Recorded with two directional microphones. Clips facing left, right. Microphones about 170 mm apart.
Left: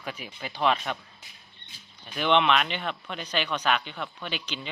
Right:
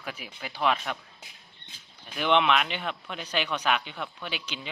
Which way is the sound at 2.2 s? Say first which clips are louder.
Left 1 dB; 5° right (ahead or behind).